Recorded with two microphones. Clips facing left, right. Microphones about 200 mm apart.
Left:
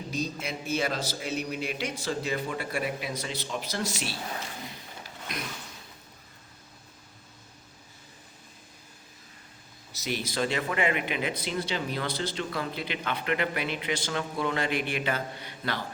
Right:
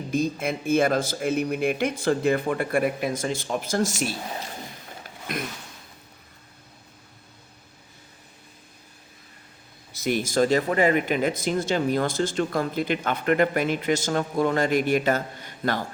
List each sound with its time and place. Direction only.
0.1 s speech: 55° right (ahead or behind)
5.3 s speech: 50° right (ahead or behind)
9.9 s speech: 50° right (ahead or behind)